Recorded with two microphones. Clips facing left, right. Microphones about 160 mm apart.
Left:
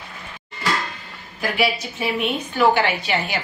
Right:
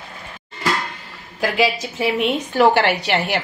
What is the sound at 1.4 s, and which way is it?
A woman's voice, 90° right.